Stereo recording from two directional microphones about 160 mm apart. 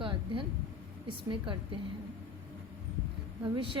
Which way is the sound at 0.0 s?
30° right (ahead or behind).